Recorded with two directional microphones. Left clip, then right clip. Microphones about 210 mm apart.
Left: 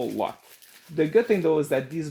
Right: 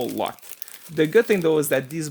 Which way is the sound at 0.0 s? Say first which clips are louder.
Right 2 dB; 30° right (ahead or behind).